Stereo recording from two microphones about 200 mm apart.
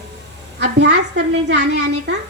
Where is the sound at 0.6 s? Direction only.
55° right (ahead or behind).